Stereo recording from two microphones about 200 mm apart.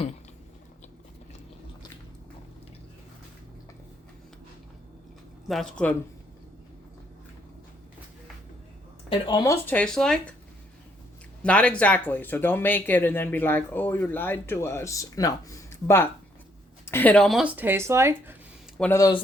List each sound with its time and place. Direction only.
5.5 s speech: centre (ahead or behind)
9.0 s speech: 20° left (ahead or behind); by 10.3 s 5° left (ahead or behind)
11.4 s speech: 5° left (ahead or behind); by 18.3 s 15° right (ahead or behind)
18.8 s speech: 15° left (ahead or behind)